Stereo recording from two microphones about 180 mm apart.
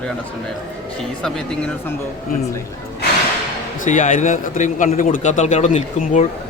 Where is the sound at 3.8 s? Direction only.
45° left (ahead or behind).